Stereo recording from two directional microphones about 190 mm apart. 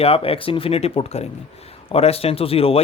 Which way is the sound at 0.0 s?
30° left (ahead or behind).